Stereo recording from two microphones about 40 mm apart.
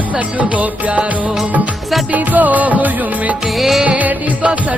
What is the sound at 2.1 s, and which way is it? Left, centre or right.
Music, right.